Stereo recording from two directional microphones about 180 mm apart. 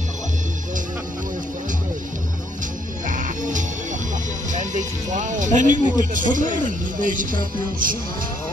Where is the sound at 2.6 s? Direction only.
45° right (ahead or behind).